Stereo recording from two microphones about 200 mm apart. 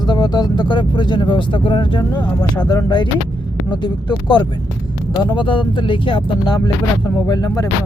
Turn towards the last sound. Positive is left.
turn(degrees=20)  # may be behind; listen again after turning